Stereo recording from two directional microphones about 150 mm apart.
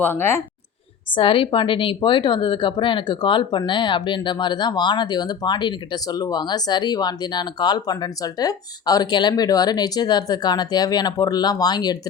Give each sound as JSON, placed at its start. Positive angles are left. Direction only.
{"t": 0.0, "sound": "speech", "side_deg": 15}
{"t": 1.1, "sound": "a woman's voice", "side_deg": 35}